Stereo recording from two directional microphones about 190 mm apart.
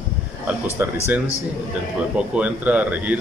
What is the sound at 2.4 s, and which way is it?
Speech, 10° right (ahead or behind).